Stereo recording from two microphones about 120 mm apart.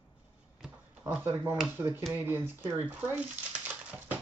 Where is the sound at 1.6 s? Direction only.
20° right (ahead or behind).